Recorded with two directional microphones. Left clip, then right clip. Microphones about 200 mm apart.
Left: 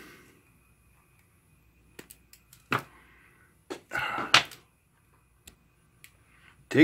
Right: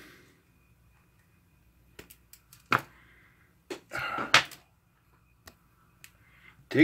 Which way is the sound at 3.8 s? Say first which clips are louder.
Left 2 dB; 15° left (ahead or behind).